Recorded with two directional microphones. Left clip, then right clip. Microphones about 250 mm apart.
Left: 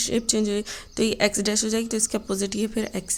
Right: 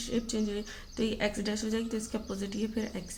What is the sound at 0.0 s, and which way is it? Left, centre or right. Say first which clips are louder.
A woman's voice: left 9 dB; left.